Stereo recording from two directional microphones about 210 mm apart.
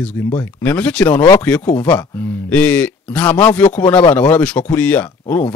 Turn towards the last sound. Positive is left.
turn(degrees=10)  # may be behind; listen again after turning